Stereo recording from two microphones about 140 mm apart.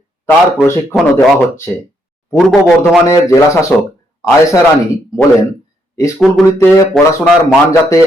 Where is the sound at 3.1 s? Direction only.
20° left (ahead or behind).